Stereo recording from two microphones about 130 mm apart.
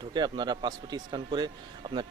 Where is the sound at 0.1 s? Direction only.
35° right (ahead or behind).